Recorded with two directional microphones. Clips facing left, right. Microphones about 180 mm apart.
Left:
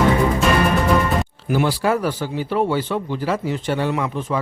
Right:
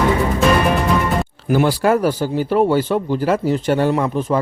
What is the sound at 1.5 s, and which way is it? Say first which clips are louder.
A man's voice: right 4 dB; 45° right (ahead or behind).